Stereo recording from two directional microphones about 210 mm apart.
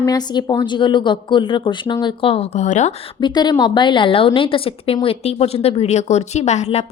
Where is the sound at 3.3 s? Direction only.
20° left (ahead or behind).